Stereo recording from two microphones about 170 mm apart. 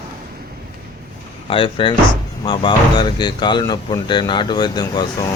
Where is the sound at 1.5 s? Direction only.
30° left (ahead or behind).